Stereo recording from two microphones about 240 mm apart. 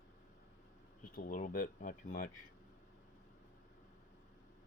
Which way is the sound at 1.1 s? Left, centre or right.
Left.